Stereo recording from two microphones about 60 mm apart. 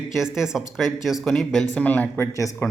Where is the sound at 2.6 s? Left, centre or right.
Left.